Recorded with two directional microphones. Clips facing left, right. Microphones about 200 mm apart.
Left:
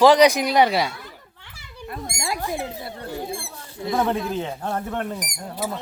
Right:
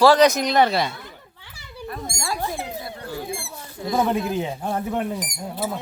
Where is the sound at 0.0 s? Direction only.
15° left (ahead or behind).